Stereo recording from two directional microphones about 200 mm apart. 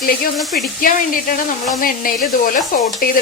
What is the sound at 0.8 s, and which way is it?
Speech, 45° left (ahead or behind).